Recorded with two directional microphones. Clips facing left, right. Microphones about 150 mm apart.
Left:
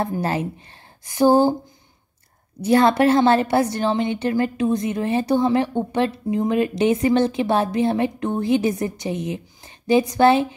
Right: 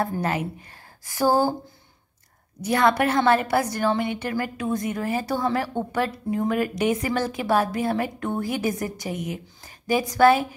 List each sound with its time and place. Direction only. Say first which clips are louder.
0.0 s a woman's voice: left 2 dB; 25° left (ahead or behind)
2.6 s a woman's voice: left 5 dB; 30° left (ahead or behind)